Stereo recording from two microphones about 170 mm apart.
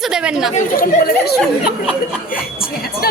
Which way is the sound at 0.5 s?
55° left (ahead or behind).